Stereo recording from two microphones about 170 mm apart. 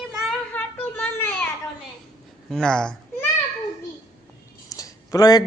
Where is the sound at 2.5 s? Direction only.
5° left (ahead or behind).